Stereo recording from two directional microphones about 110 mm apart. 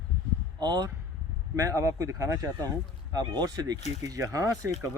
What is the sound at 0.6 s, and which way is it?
Speech, 40° right (ahead or behind).